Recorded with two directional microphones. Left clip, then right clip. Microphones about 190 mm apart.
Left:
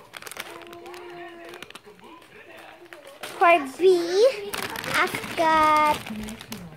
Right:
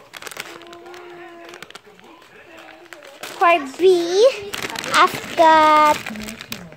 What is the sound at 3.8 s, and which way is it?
A child's voice, 15° right (ahead or behind).